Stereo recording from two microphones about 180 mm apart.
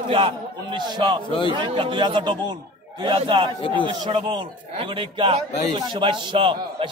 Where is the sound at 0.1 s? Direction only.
30° right (ahead or behind).